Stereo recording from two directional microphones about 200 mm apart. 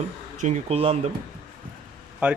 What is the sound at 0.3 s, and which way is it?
Speech, 35° right (ahead or behind).